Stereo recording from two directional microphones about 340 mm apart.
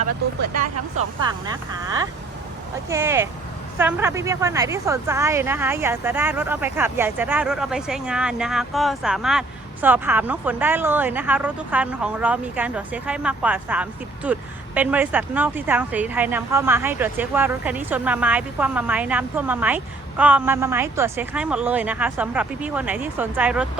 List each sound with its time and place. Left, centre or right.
0.5 s speech: right
2.9 s a woman's voice: centre